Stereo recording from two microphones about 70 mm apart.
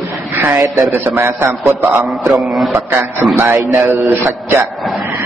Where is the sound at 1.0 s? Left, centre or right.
Right.